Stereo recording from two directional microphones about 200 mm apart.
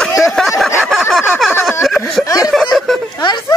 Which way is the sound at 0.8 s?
Centre (ahead or behind).